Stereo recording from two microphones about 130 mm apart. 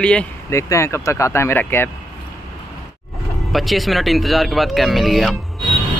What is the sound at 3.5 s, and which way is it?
Speech, centre (ahead or behind).